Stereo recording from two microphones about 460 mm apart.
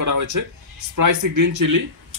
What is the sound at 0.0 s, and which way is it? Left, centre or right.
A man's voice, right.